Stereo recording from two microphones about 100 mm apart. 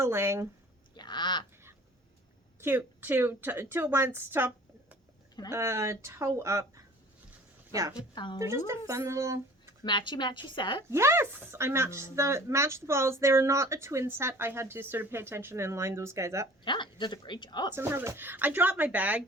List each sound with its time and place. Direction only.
0.0 s a woman's voice: 25° right (ahead or behind)
0.9 s speech: 50° left (ahead or behind)
2.6 s a woman's voice: 20° right (ahead or behind)
7.9 s a woman's voice: 50° left (ahead or behind)
8.4 s a woman's voice: 25° right (ahead or behind)
9.8 s a woman's voice: 50° left (ahead or behind)
10.9 s a woman's voice: 25° right (ahead or behind)
16.6 s a woman's voice: 50° left (ahead or behind)
17.7 s a woman's voice: 25° right (ahead or behind)